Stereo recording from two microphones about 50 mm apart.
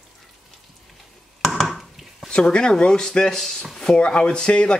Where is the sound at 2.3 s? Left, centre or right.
Centre.